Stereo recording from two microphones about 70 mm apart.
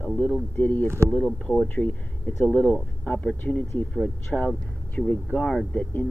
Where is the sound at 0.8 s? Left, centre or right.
Right.